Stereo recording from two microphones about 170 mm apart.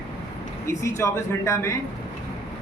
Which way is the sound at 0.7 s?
15° left (ahead or behind).